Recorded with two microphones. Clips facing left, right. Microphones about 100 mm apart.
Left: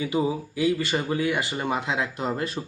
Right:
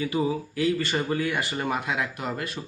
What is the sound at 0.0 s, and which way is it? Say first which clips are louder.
Speech: left 1 dB; 20° left (ahead or behind).